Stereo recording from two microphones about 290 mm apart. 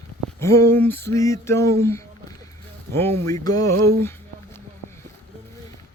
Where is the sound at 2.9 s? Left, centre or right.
Centre.